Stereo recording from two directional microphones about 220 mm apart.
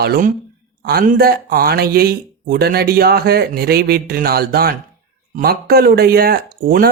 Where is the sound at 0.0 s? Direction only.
40° right (ahead or behind).